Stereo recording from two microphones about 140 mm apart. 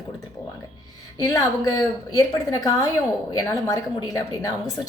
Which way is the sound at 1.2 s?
25° left (ahead or behind).